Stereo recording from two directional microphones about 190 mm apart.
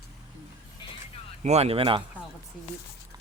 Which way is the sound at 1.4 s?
35° right (ahead or behind).